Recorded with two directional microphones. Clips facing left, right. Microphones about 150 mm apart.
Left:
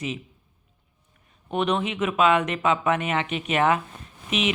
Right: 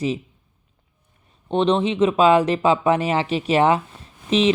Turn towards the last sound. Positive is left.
turn(degrees=-30)  # may be behind; listen again after turning